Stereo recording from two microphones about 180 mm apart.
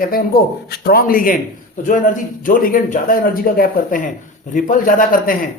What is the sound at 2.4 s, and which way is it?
A man's voice, 50° left (ahead or behind).